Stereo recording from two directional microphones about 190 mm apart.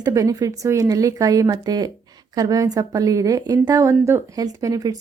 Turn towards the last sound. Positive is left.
turn(degrees=-20)  # may be behind; listen again after turning